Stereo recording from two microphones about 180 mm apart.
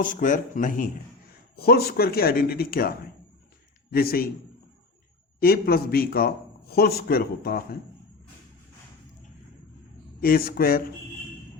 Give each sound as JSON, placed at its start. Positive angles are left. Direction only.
{"t": 0.0, "sound": "a man's voice", "side_deg": 50}
{"t": 1.5, "sound": "a man's voice", "side_deg": 60}
{"t": 3.9, "sound": "a man's voice", "side_deg": 55}
{"t": 5.4, "sound": "a man's voice", "side_deg": 55}
{"t": 10.2, "sound": "a man's voice", "side_deg": 55}